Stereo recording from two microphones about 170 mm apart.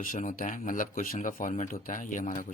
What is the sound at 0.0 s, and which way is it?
Speech, 50° left (ahead or behind).